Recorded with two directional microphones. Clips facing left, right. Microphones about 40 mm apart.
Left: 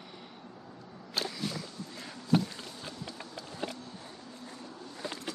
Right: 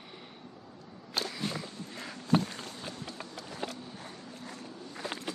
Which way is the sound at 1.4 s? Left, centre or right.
Right.